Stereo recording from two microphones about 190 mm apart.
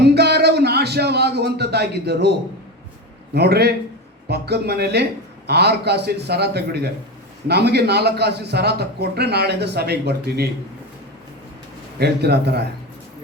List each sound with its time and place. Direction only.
0.0 s a sound: 60° right (ahead or behind)
3.3 s a man's voice: 60° right (ahead or behind)
11.9 s a man's voice: 60° right (ahead or behind)